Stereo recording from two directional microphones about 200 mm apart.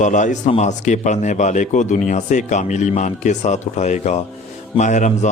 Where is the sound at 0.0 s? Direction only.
40° left (ahead or behind).